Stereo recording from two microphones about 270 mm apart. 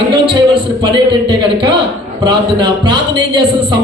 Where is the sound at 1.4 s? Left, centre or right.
Centre.